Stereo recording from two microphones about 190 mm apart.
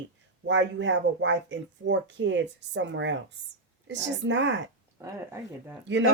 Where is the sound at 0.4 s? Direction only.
70° right (ahead or behind).